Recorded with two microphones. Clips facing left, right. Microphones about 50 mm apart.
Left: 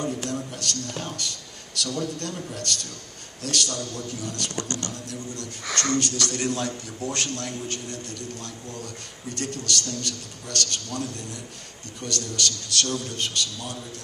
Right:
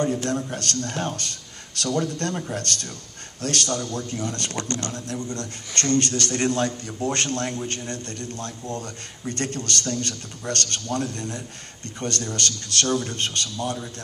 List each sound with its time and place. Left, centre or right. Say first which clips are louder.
0.0 s a man's voice: right 5 dB; right